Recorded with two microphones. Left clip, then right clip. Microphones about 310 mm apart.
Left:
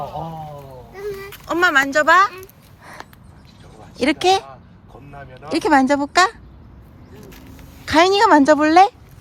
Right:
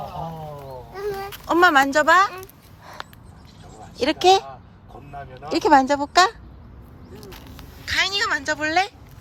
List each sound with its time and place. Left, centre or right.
0.9 s a child's voice: centre
4.0 s a woman's voice: centre
5.1 s speech: centre
5.5 s a woman's voice: left
7.2 s a sound: centre
7.9 s speech: centre